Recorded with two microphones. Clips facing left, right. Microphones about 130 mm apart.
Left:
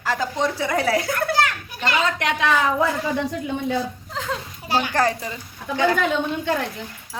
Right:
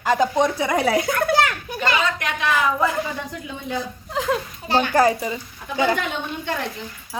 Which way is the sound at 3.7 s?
15° right (ahead or behind).